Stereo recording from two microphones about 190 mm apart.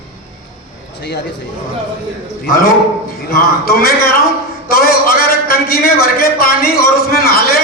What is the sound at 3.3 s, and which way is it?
Speech, 55° left (ahead or behind).